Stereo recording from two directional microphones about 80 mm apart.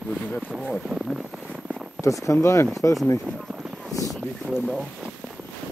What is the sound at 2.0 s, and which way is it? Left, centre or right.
Speech, left.